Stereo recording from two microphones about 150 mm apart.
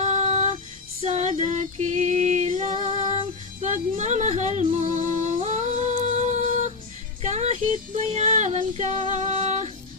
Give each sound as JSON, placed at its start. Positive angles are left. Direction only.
{"t": 0.0, "sound": "music", "side_deg": -50}
{"t": 1.0, "sound": "female singing", "side_deg": -50}
{"t": 7.2, "sound": "music", "side_deg": -50}
{"t": 8.1, "sound": "female singing", "side_deg": -50}